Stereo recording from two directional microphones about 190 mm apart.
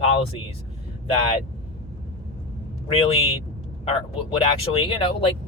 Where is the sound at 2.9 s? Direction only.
30° left (ahead or behind).